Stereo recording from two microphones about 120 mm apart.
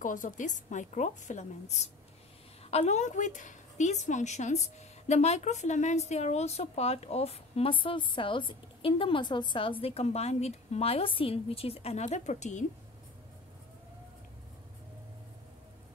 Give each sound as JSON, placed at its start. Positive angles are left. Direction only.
{"t": 0.0, "sound": "a woman's voice", "side_deg": 90}